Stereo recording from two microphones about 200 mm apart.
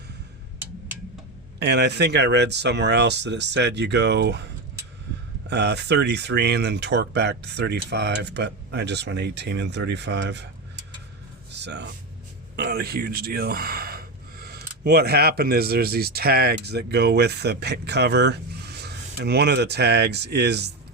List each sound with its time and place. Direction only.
1.5 s speech: 55° right (ahead or behind)
5.5 s speech: 60° right (ahead or behind)
11.5 s speech: 60° right (ahead or behind)